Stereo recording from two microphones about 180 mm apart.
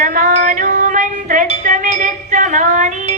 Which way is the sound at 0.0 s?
50° right (ahead or behind).